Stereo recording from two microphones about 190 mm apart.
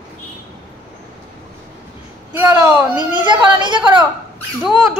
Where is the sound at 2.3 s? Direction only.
15° right (ahead or behind).